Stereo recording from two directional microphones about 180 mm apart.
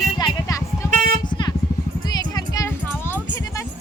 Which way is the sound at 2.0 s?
20° left (ahead or behind).